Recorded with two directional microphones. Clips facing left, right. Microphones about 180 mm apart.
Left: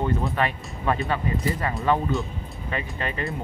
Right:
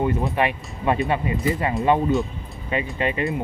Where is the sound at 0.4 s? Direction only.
20° right (ahead or behind).